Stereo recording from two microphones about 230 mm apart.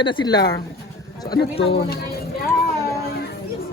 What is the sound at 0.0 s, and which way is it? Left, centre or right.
Speech, left.